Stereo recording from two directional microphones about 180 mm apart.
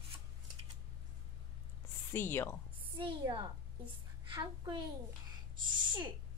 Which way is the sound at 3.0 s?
25° right (ahead or behind).